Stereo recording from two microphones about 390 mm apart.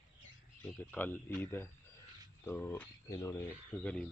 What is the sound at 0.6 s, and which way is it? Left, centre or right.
Speech, centre.